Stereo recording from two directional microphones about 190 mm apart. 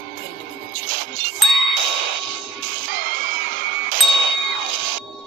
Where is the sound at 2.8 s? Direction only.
90° right.